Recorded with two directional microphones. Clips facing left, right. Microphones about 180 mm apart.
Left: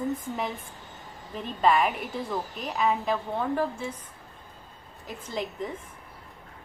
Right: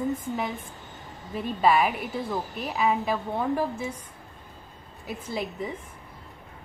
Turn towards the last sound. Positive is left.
turn(degrees=-10)  # may be behind; listen again after turning